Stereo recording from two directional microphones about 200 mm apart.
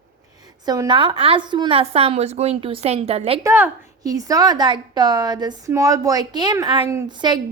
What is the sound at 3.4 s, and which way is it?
A woman's voice, 10° right (ahead or behind).